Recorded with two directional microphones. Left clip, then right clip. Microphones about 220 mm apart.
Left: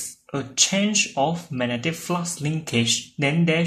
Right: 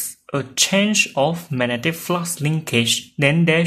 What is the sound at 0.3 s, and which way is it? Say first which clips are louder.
Speech: right 3 dB; 30° right (ahead or behind).